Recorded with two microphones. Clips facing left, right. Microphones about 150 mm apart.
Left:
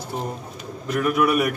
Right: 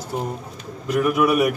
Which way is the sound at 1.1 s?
10° right (ahead or behind).